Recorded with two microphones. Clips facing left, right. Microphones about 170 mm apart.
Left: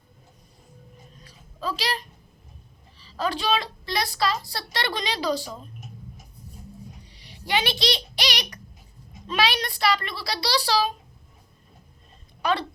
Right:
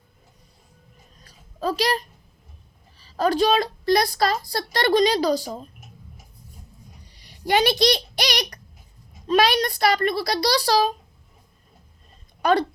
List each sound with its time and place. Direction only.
1.2 s a sound: 45° right (ahead or behind)
3.0 s a woman's voice: 45° right (ahead or behind)
7.2 s a child's voice: 45° right (ahead or behind)
12.4 s speech: 45° right (ahead or behind)